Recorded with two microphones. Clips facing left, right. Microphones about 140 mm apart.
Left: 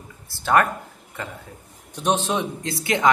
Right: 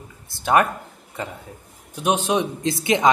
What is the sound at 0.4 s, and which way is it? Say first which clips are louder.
Speech: right 1 dB; 15° right (ahead or behind).